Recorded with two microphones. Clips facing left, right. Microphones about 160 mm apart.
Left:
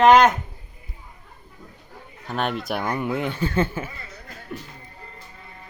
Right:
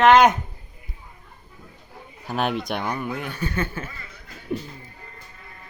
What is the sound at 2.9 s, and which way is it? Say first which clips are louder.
Speech: left 4 dB; 15° left (ahead or behind).